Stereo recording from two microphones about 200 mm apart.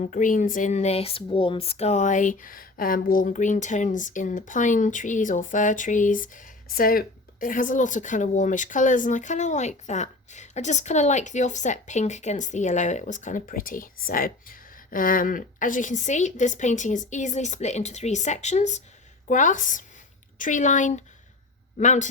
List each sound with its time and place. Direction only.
0.0 s speech: 40° left (ahead or behind)